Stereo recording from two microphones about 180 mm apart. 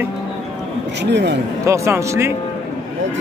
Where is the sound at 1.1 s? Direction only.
75° right (ahead or behind).